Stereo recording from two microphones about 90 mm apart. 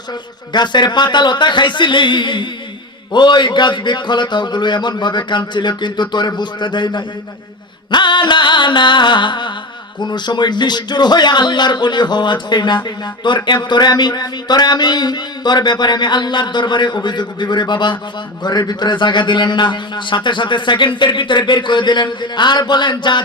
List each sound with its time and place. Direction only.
0.5 s a man's voice: 55° left (ahead or behind)